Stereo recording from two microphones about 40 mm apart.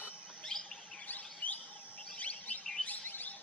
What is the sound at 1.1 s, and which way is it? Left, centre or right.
Chirp, left.